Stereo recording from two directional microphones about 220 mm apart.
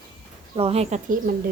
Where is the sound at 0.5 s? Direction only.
25° right (ahead or behind).